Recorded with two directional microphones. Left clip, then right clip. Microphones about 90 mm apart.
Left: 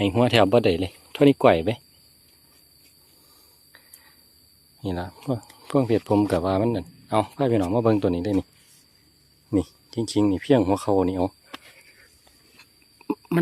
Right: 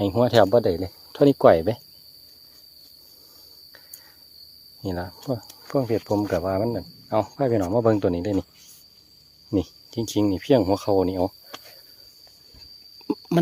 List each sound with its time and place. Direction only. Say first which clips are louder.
0.0 s speech: right 1 dB; 5° left (ahead or behind)
0.5 s speech: even; 20° left (ahead or behind)
1.3 s speech: right 3 dB; 10° right (ahead or behind)
4.8 s speech: even; 5° right (ahead or behind)
5.6 s speech: left 2 dB; 25° left (ahead or behind)
5.9 s speech: left 3 dB; 40° left (ahead or behind)
7.1 s speech: even; 10° left (ahead or behind)
9.5 s speech: even; 10° right (ahead or behind)
13.1 s a sound: right 2 dB; 25° right (ahead or behind)